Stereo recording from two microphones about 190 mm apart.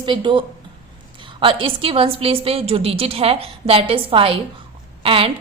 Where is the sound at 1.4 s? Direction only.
30° right (ahead or behind).